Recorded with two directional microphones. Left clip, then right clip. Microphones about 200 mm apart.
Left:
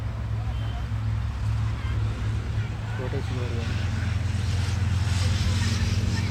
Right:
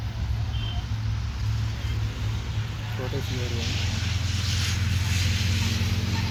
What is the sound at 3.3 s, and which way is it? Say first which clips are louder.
Vehicle: right 3 dB; 50° left (ahead or behind).